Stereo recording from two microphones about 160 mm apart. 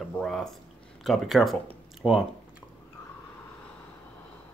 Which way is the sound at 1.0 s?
Centre (ahead or behind).